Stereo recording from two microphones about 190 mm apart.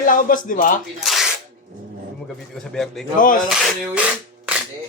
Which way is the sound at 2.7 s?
Centre (ahead or behind).